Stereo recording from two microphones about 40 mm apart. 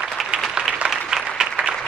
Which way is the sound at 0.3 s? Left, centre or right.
Right.